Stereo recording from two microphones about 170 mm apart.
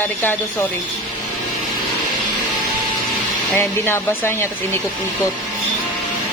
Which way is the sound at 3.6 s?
15° left (ahead or behind).